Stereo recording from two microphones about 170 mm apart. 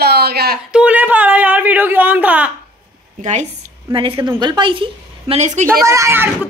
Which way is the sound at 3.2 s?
45° right (ahead or behind).